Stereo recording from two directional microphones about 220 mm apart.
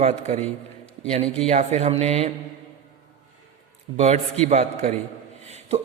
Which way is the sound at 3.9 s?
30° right (ahead or behind).